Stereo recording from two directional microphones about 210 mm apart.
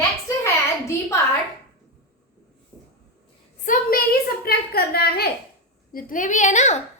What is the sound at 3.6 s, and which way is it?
A woman's voice, 40° left (ahead or behind).